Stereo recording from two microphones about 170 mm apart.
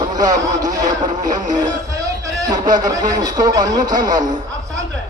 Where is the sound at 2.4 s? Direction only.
25° right (ahead or behind).